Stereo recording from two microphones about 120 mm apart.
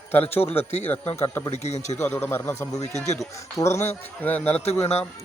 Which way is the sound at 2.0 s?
20° left (ahead or behind).